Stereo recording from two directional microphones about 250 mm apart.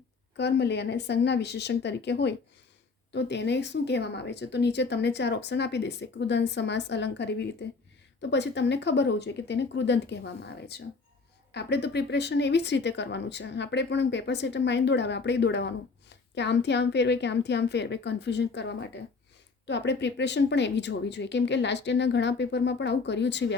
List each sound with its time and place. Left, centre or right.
0.3 s speech: left